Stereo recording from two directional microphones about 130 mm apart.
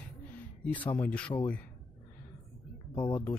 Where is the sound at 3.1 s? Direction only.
10° left (ahead or behind).